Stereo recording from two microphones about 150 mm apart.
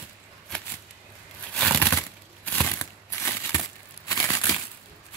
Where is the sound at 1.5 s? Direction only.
5° left (ahead or behind).